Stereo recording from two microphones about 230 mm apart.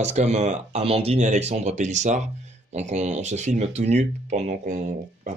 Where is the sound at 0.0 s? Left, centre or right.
Right.